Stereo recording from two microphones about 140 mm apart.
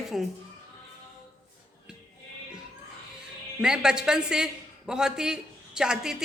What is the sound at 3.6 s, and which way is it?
Speech, 5° right (ahead or behind).